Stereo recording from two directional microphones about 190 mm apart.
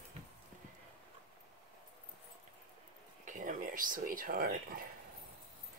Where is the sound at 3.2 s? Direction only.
40° right (ahead or behind).